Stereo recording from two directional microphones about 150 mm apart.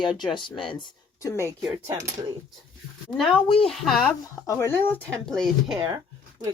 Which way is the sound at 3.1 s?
Centre (ahead or behind).